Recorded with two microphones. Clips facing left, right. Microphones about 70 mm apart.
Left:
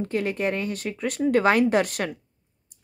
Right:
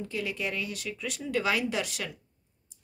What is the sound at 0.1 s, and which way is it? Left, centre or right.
Speech, left.